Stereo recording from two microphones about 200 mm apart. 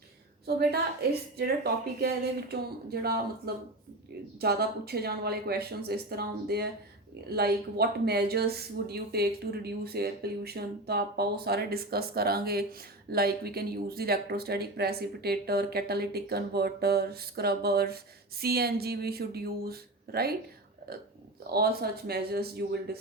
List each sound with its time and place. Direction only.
0.4 s speech: 50° right (ahead or behind)